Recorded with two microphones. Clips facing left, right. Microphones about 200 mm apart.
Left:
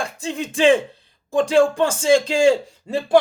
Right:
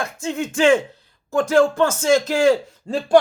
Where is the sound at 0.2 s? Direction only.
15° left (ahead or behind).